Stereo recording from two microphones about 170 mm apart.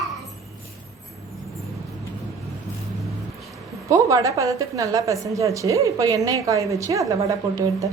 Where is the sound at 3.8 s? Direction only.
20° right (ahead or behind).